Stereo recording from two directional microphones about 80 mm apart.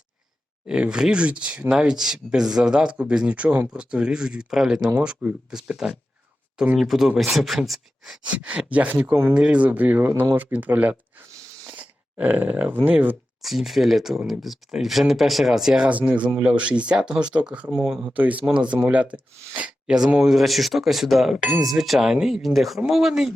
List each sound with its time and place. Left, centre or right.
0.7 s speech: centre
8.4 s speech: centre
13.4 s speech: centre
17.7 s speech: centre
18.1 s speech: centre